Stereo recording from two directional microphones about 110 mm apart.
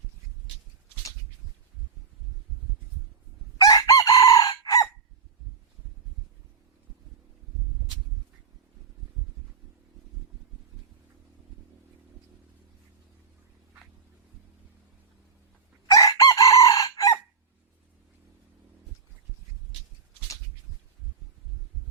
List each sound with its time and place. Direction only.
3.6 s chicken: 35° left (ahead or behind)
15.9 s chicken: 30° left (ahead or behind)